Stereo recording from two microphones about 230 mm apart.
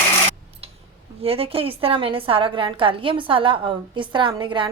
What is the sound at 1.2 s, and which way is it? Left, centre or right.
A woman's voice, right.